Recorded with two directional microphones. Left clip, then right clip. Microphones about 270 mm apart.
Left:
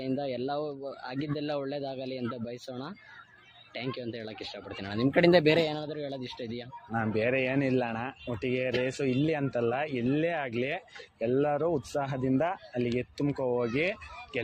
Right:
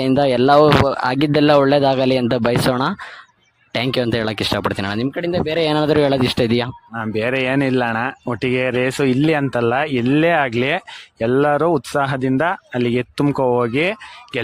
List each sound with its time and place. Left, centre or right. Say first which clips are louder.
0.0 s speech: right 18 dB; right
5.1 s speech: left 4 dB; centre
5.5 s speech: right 14 dB; right